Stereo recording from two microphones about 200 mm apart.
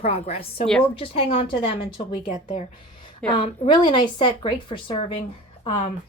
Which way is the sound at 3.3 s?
25° left (ahead or behind).